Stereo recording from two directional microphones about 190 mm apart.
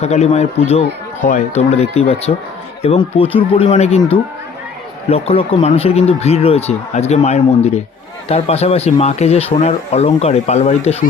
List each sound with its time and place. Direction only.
0.0 s speech: 35° left (ahead or behind)
5.0 s speech: 30° left (ahead or behind)